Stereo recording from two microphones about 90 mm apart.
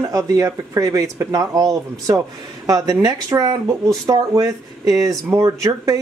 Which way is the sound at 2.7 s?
45° right (ahead or behind).